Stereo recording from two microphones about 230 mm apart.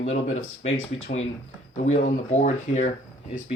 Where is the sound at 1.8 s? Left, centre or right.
Left.